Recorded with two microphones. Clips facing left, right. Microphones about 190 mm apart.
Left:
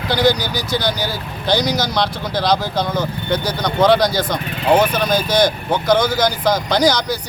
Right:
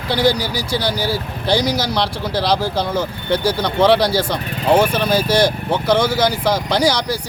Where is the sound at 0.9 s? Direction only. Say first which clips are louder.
Right 3 dB; 10° right (ahead or behind).